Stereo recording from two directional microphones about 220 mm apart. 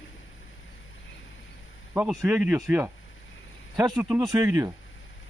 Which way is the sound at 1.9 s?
5° right (ahead or behind).